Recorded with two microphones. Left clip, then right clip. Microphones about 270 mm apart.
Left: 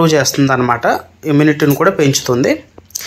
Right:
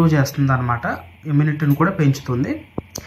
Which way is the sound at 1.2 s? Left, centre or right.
Left.